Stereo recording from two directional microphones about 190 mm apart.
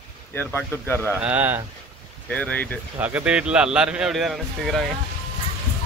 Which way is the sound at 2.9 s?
10° right (ahead or behind).